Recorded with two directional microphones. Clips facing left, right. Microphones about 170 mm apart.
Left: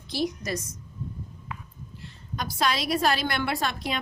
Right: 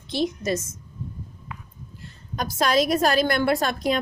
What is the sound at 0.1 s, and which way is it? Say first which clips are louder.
Speech: right 4 dB; 25° right (ahead or behind).